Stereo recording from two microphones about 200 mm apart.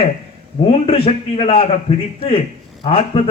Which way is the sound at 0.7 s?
30° left (ahead or behind).